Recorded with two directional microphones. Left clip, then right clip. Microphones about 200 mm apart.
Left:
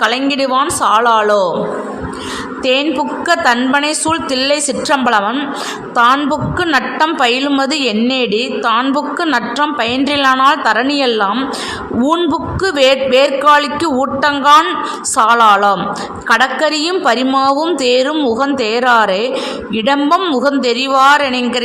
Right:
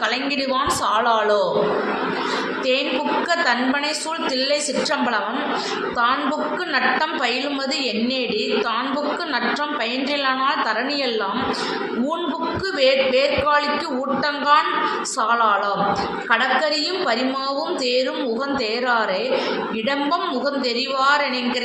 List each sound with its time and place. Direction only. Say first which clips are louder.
0.0 s a woman's voice: left 8 dB; 55° left (ahead or behind)
3.2 s a woman's voice: left 11 dB; 55° left (ahead or behind)
6.6 s a woman's voice: left 8 dB; 55° left (ahead or behind)
12.6 s a woman's voice: left 7 dB; 55° left (ahead or behind)